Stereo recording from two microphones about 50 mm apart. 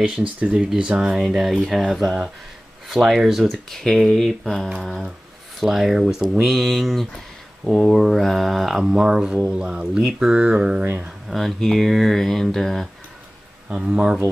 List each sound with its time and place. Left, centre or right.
0.0 s speech: right
1.2 s speech: centre
3.4 s speech: centre
5.6 s speech: centre
11.2 s speech: centre
13.7 s speech: centre